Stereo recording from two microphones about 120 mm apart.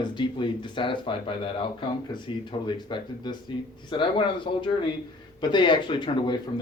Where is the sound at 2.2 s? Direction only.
40° left (ahead or behind).